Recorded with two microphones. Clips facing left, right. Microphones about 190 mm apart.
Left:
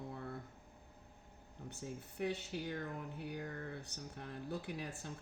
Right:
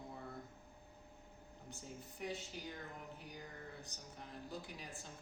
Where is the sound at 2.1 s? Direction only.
65° left (ahead or behind).